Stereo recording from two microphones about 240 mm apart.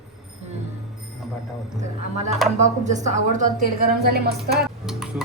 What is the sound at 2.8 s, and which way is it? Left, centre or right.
A woman's voice, right.